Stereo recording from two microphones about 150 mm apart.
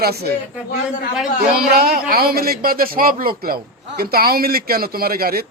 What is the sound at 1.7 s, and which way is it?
A man's voice, 85° right.